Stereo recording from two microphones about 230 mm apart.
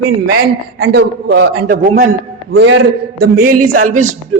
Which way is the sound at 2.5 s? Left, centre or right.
Right.